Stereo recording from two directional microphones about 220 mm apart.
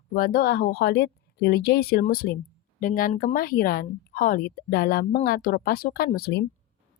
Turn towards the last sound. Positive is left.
turn(degrees=45)  # may be behind; listen again after turning